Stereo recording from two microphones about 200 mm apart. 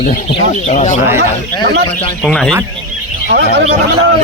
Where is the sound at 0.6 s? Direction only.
35° left (ahead or behind).